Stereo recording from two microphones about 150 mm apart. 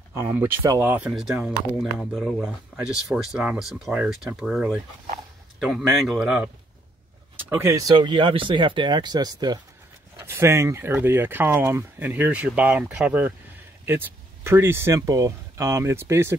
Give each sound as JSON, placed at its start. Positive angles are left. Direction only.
{"t": 0.1, "sound": "speech", "side_deg": -15}
{"t": 7.3, "sound": "speech", "side_deg": -15}
{"t": 7.9, "sound": "speech", "side_deg": -30}
{"t": 10.1, "sound": "speech", "side_deg": -15}